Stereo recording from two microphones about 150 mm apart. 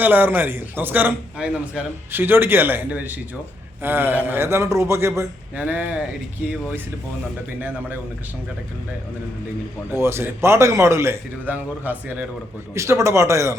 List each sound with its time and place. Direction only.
0.0 s a man's voice: 15° right (ahead or behind)
9.9 s a man's voice: 15° right (ahead or behind)